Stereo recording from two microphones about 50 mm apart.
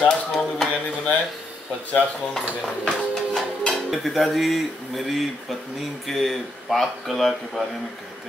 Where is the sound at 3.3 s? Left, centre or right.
Centre.